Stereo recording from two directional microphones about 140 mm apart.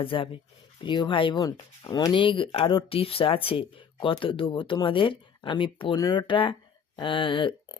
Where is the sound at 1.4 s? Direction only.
25° left (ahead or behind).